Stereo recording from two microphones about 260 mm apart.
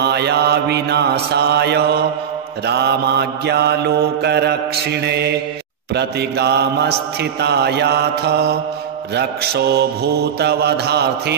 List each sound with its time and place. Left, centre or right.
0.0 s mantra: right